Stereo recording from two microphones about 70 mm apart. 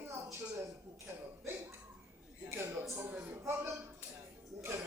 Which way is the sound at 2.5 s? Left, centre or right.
Right.